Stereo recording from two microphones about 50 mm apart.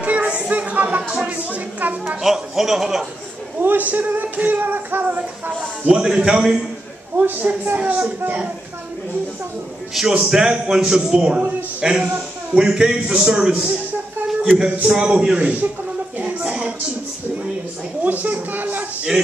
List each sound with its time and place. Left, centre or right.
0.0 s a sound: right
1.2 s speech: right
2.2 s a man's voice: centre
3.5 s speech: right
5.9 s a man's voice: centre
7.2 s speech: right
7.7 s a man's voice: centre
9.9 s a man's voice: centre
10.3 s a man's voice: centre
16.2 s a sound: right
18.0 s speech: right